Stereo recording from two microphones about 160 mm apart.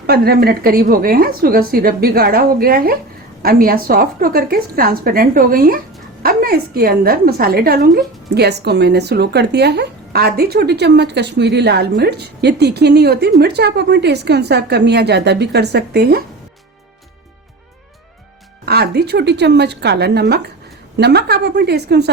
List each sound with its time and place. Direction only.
0.1 s a woman's voice: 75° right (ahead or behind)
18.6 s a woman's voice: 80° right